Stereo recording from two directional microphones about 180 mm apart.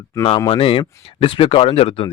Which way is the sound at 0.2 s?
25° left (ahead or behind).